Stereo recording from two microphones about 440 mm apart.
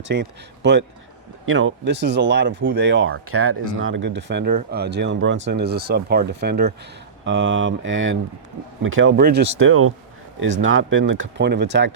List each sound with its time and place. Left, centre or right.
0.0 s speech: right